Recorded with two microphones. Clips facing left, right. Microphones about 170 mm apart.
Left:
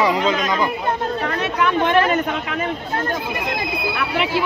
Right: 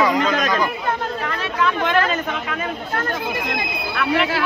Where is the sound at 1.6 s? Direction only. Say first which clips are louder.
Left 2 dB; 20° left (ahead or behind).